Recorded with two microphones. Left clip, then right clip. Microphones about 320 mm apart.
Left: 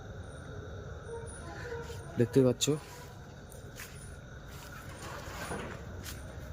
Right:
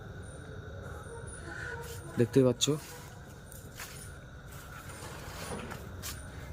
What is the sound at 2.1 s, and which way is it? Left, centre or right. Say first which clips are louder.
Speech: right 1 dB; centre.